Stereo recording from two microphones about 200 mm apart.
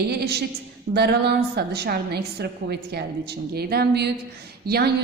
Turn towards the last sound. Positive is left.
turn(degrees=-50)  # may be behind; listen again after turning